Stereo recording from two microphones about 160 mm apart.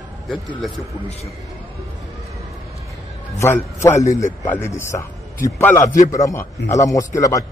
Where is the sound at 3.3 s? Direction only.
15° left (ahead or behind).